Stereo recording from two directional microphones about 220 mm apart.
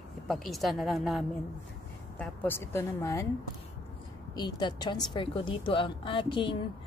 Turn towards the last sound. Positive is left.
turn(degrees=20)  # may be behind; listen again after turning